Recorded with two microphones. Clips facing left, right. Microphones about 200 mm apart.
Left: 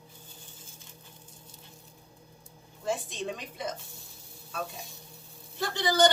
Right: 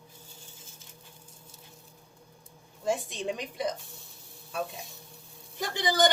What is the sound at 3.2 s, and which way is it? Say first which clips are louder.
Speech: right 5 dB; 15° right (ahead or behind).